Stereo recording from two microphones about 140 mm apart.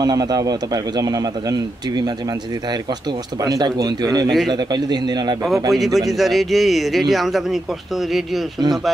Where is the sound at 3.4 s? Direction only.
25° right (ahead or behind).